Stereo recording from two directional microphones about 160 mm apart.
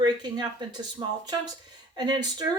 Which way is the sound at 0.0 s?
25° right (ahead or behind).